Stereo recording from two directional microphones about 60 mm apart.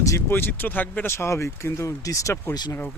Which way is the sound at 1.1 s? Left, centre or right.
Left.